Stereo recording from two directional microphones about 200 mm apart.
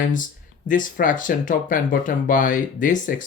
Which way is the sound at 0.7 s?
40° left (ahead or behind).